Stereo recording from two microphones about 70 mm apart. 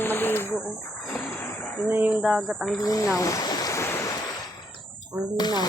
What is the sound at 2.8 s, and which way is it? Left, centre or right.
Speech, left.